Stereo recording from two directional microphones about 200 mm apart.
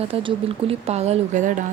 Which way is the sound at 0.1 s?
25° right (ahead or behind).